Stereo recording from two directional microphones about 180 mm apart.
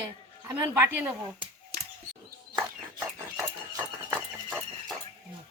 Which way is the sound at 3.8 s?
10° right (ahead or behind).